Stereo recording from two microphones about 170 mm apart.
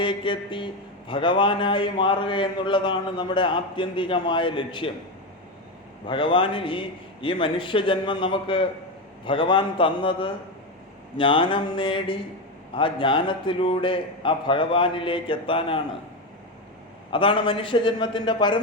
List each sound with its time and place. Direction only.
0.0 s a man's voice: 30° left (ahead or behind)
6.1 s a man's voice: 30° left (ahead or behind)
17.1 s a man's voice: 30° left (ahead or behind)